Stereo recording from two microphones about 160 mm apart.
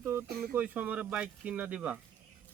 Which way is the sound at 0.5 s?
10° right (ahead or behind).